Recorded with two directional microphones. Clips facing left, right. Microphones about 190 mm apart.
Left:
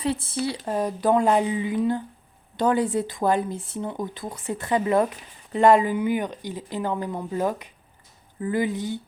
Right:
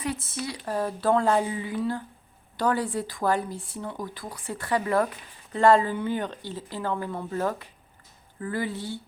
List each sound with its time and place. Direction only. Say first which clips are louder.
0.0 s speech: left 6 dB; 30° left (ahead or behind)